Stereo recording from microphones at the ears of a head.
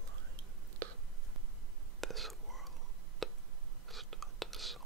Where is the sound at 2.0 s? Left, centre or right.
Centre.